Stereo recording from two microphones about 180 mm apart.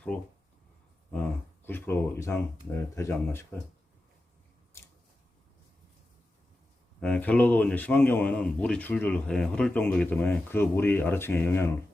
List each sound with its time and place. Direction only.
0.1 s a man's voice: 5° left (ahead or behind)
1.6 s a man's voice: 10° left (ahead or behind)
7.0 s a man's voice: 10° left (ahead or behind)